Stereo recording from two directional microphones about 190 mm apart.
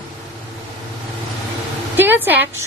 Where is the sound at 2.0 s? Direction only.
10° right (ahead or behind).